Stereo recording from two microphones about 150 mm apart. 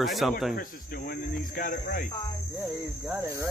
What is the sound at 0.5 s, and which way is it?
Speech, 75° left (ahead or behind).